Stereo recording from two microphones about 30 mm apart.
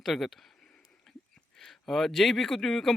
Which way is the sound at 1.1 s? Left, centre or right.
Centre.